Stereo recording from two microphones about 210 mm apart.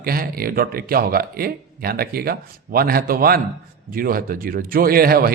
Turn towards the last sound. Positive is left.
turn(degrees=-45)  # may be behind; listen again after turning